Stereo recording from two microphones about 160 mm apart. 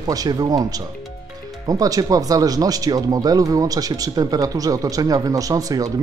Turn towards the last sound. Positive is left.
turn(degrees=-20)  # may be behind; listen again after turning